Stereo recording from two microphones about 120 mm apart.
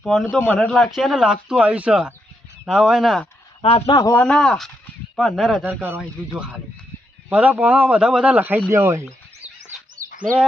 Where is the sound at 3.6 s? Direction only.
55° left (ahead or behind).